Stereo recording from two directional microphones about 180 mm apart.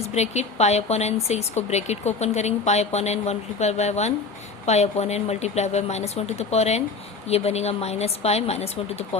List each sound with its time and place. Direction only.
0.0 s speech: 35° left (ahead or behind)